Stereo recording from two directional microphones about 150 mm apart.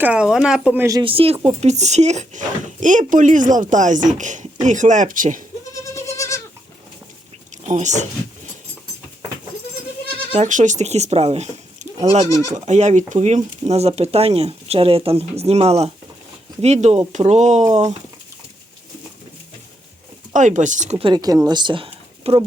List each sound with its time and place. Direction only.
0.0 s speech: 5° right (ahead or behind)
1.0 s speech: 40° right (ahead or behind)
1.6 s speech: 50° right (ahead or behind)
5.8 s goat: 20° left (ahead or behind)
7.6 s speech: 50° right (ahead or behind)
10.3 s speech: 55° right (ahead or behind)
20.3 s speech: 55° right (ahead or behind)
21.0 s speech: 25° right (ahead or behind)